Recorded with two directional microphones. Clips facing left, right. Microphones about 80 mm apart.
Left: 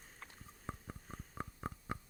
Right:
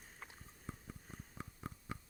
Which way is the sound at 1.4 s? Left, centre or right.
Left.